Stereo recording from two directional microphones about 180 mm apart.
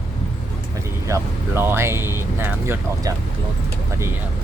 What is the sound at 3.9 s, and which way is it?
Speech, 15° right (ahead or behind).